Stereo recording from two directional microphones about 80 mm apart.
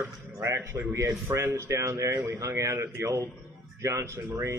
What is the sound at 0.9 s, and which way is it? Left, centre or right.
A man's voice, right.